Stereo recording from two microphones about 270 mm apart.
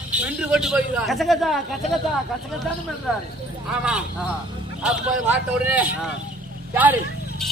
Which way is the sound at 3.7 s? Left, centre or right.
Centre.